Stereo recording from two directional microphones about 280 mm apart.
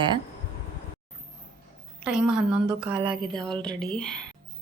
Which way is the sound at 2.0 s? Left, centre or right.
Centre.